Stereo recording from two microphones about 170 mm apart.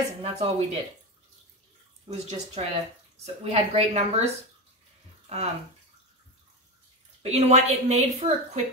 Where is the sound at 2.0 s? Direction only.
40° right (ahead or behind).